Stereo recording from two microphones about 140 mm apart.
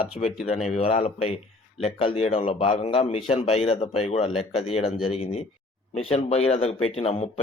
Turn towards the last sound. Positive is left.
turn(degrees=45)  # may be behind; listen again after turning